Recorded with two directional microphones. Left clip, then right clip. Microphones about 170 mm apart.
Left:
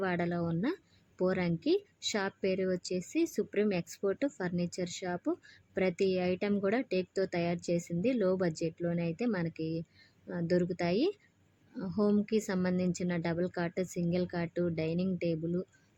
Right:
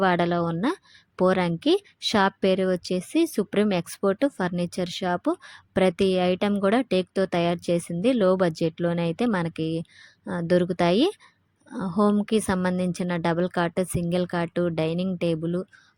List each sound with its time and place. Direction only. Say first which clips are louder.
0.0 s a woman's voice: right 12 dB; 35° right (ahead or behind)